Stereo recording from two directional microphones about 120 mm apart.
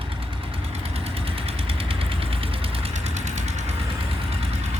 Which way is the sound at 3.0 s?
75° right (ahead or behind).